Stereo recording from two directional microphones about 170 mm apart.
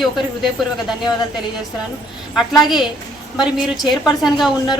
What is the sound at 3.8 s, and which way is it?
Speech, 25° left (ahead or behind).